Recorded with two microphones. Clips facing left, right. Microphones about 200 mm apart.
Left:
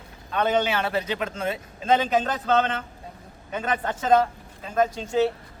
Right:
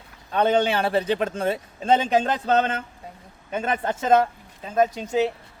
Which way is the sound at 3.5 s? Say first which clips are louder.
Right 2 dB; 25° right (ahead or behind).